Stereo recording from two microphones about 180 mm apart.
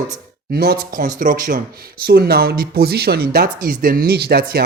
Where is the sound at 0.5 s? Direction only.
60° right (ahead or behind).